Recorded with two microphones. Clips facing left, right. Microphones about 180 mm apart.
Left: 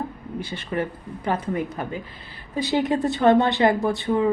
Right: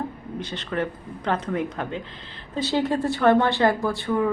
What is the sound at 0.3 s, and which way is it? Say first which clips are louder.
Speech: left 1 dB; 10° left (ahead or behind).